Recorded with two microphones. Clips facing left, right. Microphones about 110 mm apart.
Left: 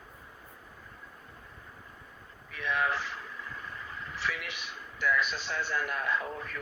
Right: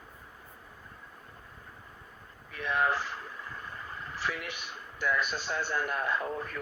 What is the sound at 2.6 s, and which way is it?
Speech, 40° right (ahead or behind).